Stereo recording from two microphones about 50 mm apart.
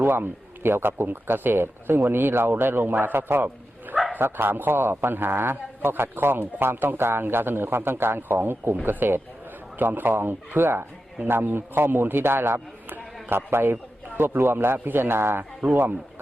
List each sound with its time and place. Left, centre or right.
0.0 s a man's voice: right